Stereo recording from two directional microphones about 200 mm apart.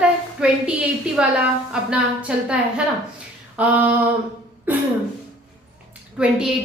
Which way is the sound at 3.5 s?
10° right (ahead or behind).